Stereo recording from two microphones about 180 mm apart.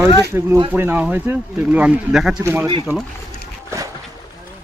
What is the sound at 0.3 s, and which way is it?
Speech, 15° right (ahead or behind).